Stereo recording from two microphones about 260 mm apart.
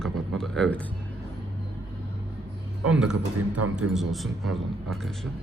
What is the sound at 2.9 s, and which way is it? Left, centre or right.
A man's voice, centre.